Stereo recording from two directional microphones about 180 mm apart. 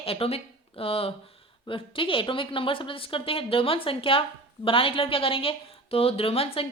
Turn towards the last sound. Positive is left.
turn(degrees=30)  # may be behind; listen again after turning